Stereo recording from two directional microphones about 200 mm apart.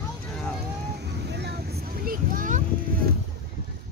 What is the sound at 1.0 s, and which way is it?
Vehicle, 55° right (ahead or behind).